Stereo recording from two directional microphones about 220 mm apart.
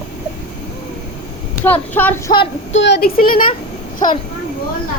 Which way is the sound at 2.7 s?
50° left (ahead or behind).